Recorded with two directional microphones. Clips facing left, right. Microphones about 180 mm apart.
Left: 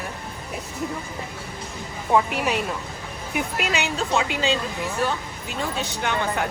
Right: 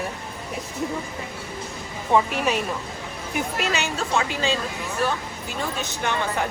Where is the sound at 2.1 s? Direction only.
15° left (ahead or behind).